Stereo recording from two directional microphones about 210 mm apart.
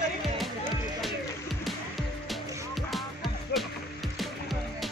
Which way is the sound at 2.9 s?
Centre (ahead or behind).